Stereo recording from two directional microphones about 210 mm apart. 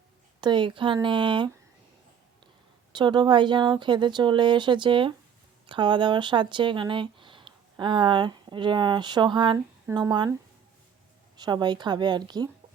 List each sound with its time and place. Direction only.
0.4 s speech: 20° right (ahead or behind)
2.9 s speech: 20° right (ahead or behind)
11.3 s speech: 20° right (ahead or behind)